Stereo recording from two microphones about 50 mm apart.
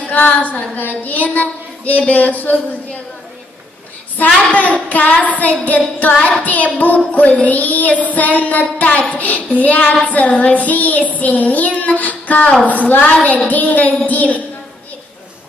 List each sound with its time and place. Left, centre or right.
0.1 s child singing: left
4.5 s a woman's voice: left
4.9 s child singing: left
12.6 s a woman's voice: left
13.5 s child singing: left